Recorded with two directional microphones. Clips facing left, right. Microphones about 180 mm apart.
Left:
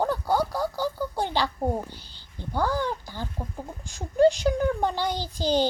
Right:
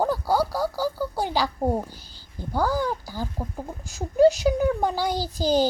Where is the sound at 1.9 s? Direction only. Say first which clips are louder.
Right 2 dB; 40° right (ahead or behind).